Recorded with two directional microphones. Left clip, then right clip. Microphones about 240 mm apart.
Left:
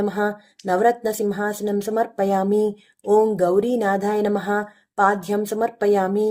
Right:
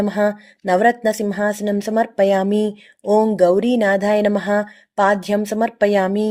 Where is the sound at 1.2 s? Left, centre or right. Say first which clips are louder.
Right 3 dB; right.